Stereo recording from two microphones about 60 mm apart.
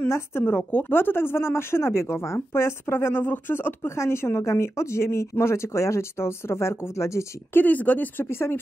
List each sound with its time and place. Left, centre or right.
0.1 s a woman's voice: left
0.7 s speech: left
0.9 s a woman's voice: left
3.9 s a woman's voice: left
7.5 s speech: left